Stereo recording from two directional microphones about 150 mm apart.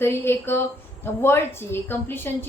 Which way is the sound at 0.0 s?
15° left (ahead or behind).